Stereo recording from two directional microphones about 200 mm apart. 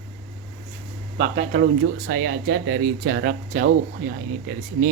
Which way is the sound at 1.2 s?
35° right (ahead or behind).